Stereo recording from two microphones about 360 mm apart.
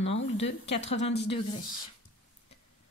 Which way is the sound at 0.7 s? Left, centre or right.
Centre.